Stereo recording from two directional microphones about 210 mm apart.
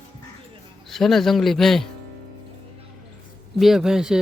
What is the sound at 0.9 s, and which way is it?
Speech, centre (ahead or behind).